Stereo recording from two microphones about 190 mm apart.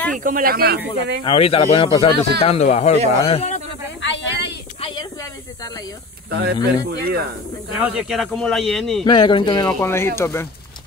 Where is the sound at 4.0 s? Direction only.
70° left (ahead or behind).